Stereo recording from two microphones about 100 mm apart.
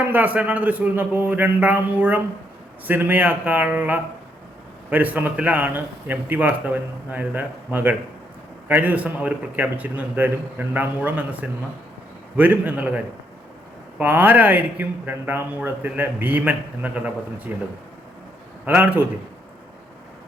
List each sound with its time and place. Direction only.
0.0 s a man's voice: 20° right (ahead or behind)
14.0 s a man's voice: 20° right (ahead or behind)
18.6 s a man's voice: 15° right (ahead or behind)